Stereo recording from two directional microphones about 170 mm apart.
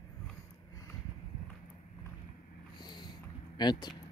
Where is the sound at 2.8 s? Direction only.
25° left (ahead or behind).